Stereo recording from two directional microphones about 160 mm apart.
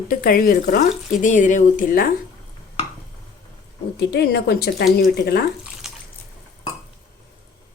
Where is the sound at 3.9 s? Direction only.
90° left.